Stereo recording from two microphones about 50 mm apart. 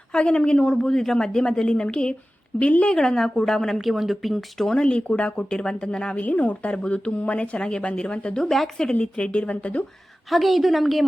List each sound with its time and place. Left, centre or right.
0.1 s a woman's voice: centre
4.8 s a woman's voice: centre
6.1 s a woman's voice: left
8.4 s a woman's voice: centre
9.0 s a woman's voice: left
10.2 s speech: centre